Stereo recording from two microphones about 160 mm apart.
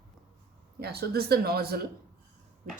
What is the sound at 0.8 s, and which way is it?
Speech, 75° right (ahead or behind).